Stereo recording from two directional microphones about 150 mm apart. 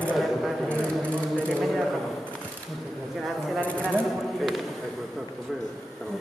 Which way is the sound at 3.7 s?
10° left (ahead or behind).